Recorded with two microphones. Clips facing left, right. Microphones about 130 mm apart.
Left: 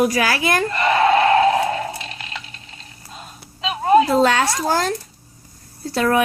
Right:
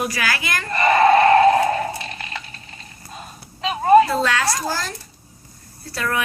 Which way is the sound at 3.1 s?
Centre (ahead or behind).